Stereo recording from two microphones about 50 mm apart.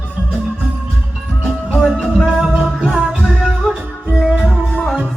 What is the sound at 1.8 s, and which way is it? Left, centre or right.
Music, centre.